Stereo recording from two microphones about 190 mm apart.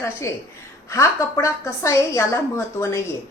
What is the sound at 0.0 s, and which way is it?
A woman's voice, 15° left (ahead or behind).